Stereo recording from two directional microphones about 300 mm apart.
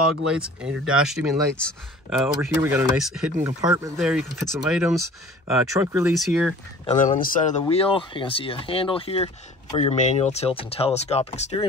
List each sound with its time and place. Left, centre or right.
0.3 s speech: centre
6.9 s speech: left